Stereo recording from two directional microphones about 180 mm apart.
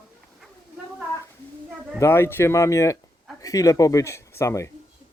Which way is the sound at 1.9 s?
15° left (ahead or behind).